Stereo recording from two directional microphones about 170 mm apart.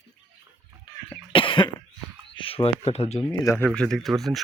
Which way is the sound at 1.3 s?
30° left (ahead or behind).